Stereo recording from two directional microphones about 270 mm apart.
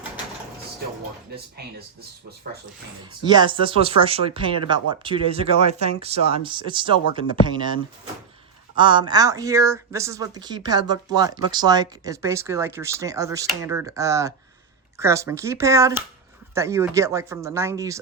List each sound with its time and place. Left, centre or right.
3.2 s speech: centre
8.7 s speech: centre